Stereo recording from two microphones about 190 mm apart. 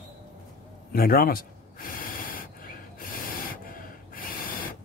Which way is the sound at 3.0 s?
50° left (ahead or behind).